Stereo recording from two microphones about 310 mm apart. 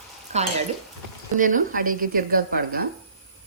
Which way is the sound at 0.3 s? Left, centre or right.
Right.